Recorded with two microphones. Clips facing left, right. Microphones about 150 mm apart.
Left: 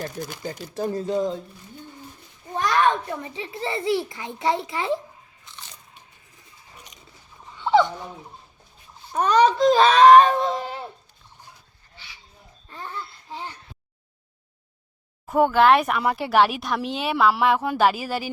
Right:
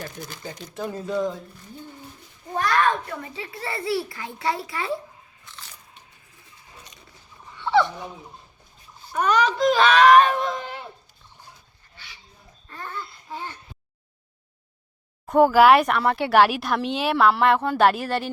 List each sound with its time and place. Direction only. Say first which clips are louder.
0.7 s speech: left 4 dB; 35° left (ahead or behind)
2.6 s a child's voice: left 1 dB; 20° left (ahead or behind)
7.5 s fowl: left 2 dB; 20° left (ahead or behind)
9.1 s speech: left 3 dB; 30° left (ahead or behind)
15.3 s speech: right 2 dB; centre (ahead or behind)